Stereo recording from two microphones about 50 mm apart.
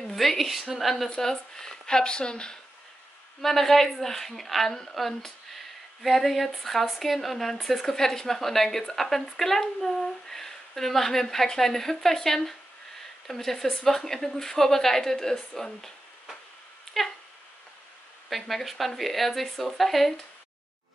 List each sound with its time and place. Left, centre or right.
0.1 s a woman's voice: centre
3.3 s a woman's voice: centre
18.3 s a woman's voice: centre